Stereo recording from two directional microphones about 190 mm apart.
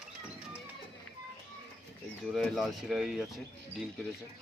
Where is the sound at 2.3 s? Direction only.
Centre (ahead or behind).